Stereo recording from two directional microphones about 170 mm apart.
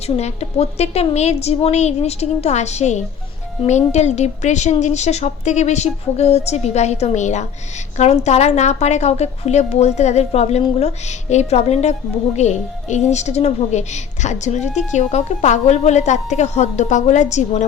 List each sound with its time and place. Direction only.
0.2 s a woman's voice: 40° left (ahead or behind)